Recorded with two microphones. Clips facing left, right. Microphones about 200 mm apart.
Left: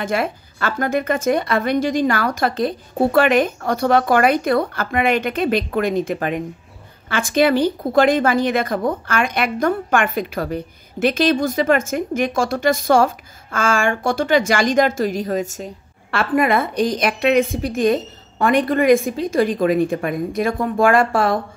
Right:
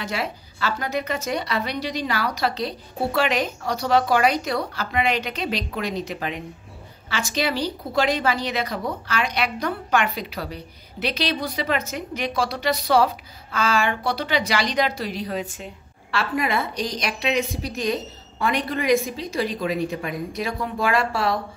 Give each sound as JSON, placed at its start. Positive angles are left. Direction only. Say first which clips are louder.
{"t": 0.0, "sound": "a woman's voice", "louder": "left 7 dB", "side_deg": 50}